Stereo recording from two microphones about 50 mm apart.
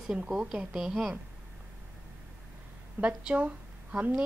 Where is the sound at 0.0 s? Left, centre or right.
Centre.